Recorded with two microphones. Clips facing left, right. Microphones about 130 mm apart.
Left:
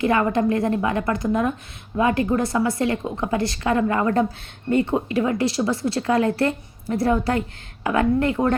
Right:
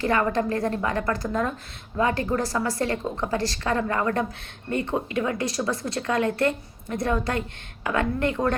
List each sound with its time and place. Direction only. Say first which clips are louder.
0.0 s speech: left 4 dB; 25° left (ahead or behind)